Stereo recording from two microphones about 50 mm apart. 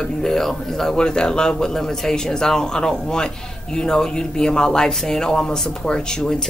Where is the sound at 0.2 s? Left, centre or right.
Centre.